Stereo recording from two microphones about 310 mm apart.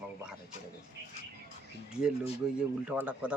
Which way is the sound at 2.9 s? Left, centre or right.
Centre.